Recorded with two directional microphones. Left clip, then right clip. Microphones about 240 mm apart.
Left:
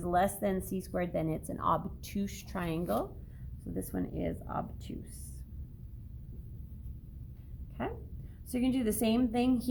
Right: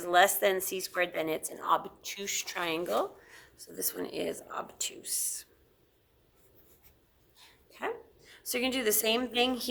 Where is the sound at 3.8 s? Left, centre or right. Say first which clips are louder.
Right 2 dB; right.